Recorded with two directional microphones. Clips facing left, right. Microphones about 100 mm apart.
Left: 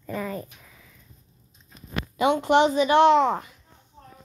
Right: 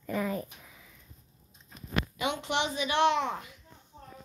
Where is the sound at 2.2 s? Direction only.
45° left (ahead or behind).